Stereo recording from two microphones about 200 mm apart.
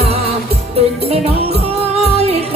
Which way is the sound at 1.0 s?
30° right (ahead or behind).